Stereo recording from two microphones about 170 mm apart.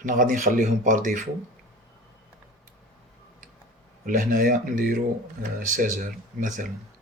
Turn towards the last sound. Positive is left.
turn(degrees=-50)  # may be behind; listen again after turning